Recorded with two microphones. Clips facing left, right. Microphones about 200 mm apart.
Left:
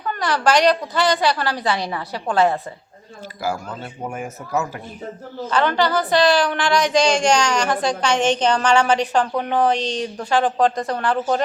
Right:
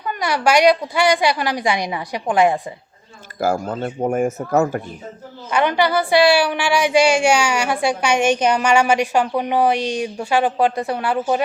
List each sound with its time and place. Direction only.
0.0 s a woman's voice: 10° right (ahead or behind)
3.4 s a man's voice: 50° right (ahead or behind)
5.5 s a woman's voice: 10° right (ahead or behind)